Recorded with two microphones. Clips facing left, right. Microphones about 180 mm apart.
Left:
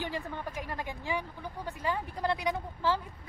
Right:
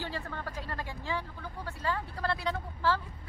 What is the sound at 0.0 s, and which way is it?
Speech, 15° left (ahead or behind).